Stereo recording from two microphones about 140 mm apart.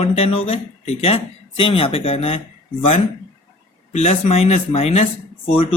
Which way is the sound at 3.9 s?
50° left (ahead or behind).